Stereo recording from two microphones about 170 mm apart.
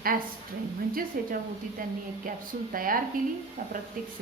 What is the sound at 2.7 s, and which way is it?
Speech, 55° right (ahead or behind).